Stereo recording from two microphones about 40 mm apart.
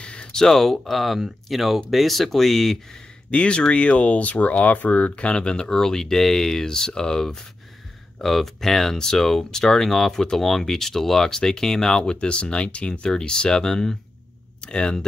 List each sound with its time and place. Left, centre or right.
0.0 s speech: left; by 2.8 s centre
3.3 s speech: left
12.0 s speech: left